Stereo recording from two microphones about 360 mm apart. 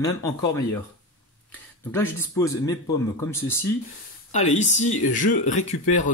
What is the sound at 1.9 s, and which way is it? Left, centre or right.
Speech, centre.